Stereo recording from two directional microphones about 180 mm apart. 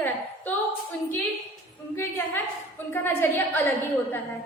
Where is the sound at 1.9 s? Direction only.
10° left (ahead or behind).